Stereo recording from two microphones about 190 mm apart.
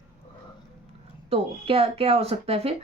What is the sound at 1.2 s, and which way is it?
Speech, 30° right (ahead or behind).